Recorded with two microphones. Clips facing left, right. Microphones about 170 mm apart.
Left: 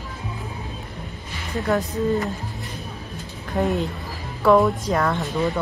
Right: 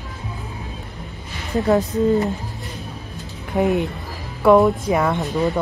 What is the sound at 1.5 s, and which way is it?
Speech, 20° right (ahead or behind).